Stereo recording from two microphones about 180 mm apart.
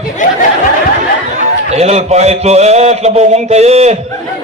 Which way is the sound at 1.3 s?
40° right (ahead or behind).